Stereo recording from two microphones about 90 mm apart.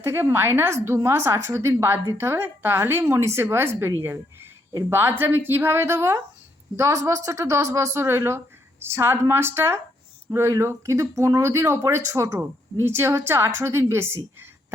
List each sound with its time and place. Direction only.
0.0 s a woman's voice: 25° right (ahead or behind)